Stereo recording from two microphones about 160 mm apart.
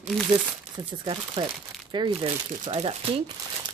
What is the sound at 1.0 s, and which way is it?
Speech, 30° right (ahead or behind).